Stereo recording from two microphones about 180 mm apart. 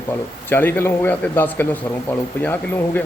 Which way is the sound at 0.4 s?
10° left (ahead or behind).